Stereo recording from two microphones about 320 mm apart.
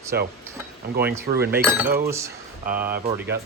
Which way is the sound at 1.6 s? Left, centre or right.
Centre.